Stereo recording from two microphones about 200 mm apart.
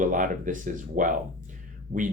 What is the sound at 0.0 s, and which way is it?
Speech, 40° right (ahead or behind).